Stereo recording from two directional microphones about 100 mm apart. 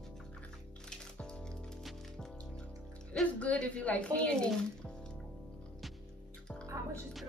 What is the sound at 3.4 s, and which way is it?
Speech, 15° left (ahead or behind).